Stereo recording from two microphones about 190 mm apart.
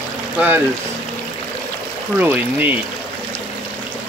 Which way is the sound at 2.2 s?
10° right (ahead or behind).